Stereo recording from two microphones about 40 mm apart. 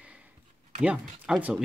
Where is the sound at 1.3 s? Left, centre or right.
Centre.